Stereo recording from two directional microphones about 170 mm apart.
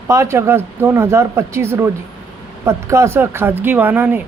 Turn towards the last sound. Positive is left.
turn(degrees=-10)  # may be behind; listen again after turning